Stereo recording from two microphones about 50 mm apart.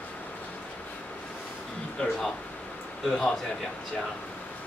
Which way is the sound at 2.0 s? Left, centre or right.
Centre.